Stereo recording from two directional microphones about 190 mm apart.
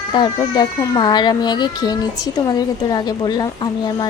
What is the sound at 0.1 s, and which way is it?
Speech, 20° left (ahead or behind).